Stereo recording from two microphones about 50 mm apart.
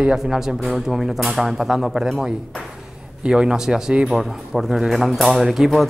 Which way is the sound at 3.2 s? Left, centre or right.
Centre.